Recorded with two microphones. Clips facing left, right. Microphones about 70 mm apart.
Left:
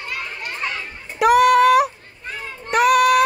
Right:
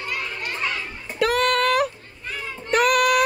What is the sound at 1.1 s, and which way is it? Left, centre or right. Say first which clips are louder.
Female singing: left 7 dB; centre.